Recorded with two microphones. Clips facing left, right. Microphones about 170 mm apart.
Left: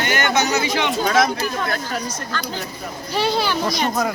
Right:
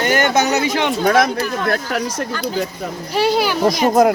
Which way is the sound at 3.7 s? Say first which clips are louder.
Right 8 dB; 50° right (ahead or behind).